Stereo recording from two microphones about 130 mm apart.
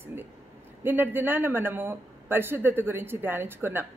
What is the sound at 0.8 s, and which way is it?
Speech, 15° right (ahead or behind).